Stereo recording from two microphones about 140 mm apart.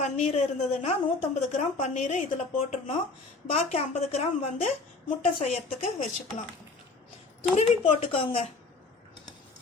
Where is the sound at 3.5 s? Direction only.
55° left (ahead or behind).